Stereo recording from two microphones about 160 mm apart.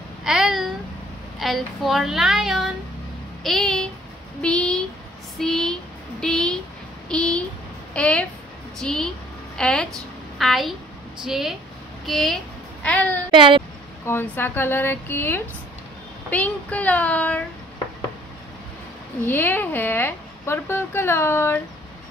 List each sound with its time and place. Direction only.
0.2 s babbling: 5° right (ahead or behind)
1.4 s a woman's voice: centre (ahead or behind)
13.3 s speech: 30° right (ahead or behind)
14.0 s a woman's voice: 15° left (ahead or behind)
19.2 s a woman's voice: 10° left (ahead or behind)